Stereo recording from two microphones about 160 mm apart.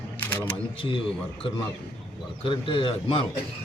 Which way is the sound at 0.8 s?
30° left (ahead or behind).